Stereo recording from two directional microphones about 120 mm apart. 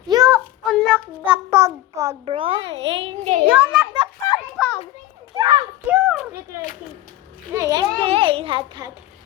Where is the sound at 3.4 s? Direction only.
10° right (ahead or behind).